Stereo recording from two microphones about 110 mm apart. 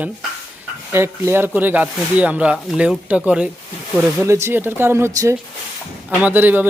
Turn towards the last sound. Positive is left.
turn(degrees=-15)  # may be behind; listen again after turning